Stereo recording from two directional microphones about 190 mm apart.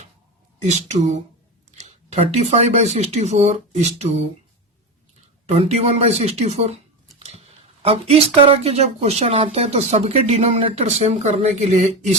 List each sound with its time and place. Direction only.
0.6 s speech: 35° right (ahead or behind)
5.5 s speech: 35° right (ahead or behind)
7.2 s a sound: 30° right (ahead or behind)
8.4 s speech: 30° right (ahead or behind)